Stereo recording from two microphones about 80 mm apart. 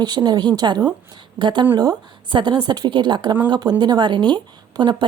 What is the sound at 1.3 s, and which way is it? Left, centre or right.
A woman's voice, right.